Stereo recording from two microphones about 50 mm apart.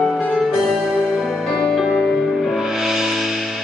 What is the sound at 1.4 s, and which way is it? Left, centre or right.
Music, centre.